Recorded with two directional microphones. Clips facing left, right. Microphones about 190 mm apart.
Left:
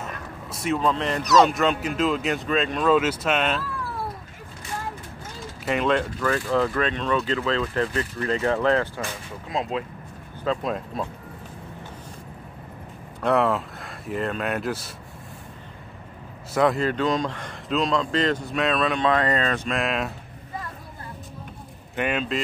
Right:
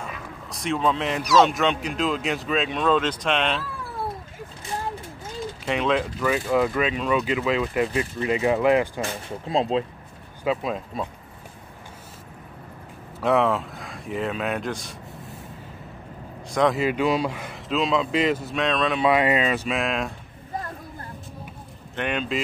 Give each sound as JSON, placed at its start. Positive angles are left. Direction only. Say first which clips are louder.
{"t": 0.0, "sound": "speech", "louder": "left 1 dB", "side_deg": 5}
{"t": 5.7, "sound": "speech", "louder": "left 1 dB", "side_deg": 0}
{"t": 9.5, "sound": "speech", "louder": "right 5 dB", "side_deg": -30}
{"t": 10.4, "sound": "speech", "louder": "right 1 dB", "side_deg": -5}
{"t": 13.2, "sound": "speech", "louder": "right 1 dB", "side_deg": 0}
{"t": 16.5, "sound": "speech", "louder": "even", "side_deg": 0}
{"t": 16.8, "sound": "speech", "louder": "right 1 dB", "side_deg": -10}
{"t": 18.9, "sound": "speech", "louder": "right 2 dB", "side_deg": -10}
{"t": 21.9, "sound": "speech", "louder": "left 1 dB", "side_deg": 5}